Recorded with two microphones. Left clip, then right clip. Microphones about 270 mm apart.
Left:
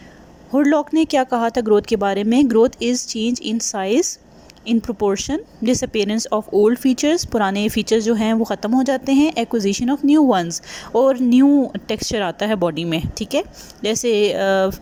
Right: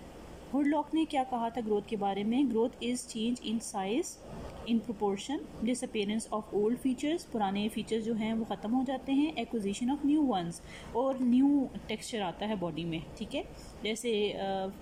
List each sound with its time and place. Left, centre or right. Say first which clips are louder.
0.5 s speech: left 14 dB; left